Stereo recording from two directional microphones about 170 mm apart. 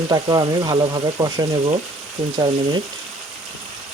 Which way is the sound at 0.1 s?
25° right (ahead or behind).